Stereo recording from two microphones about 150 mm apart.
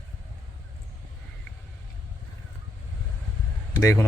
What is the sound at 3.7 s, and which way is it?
Speech, 20° left (ahead or behind).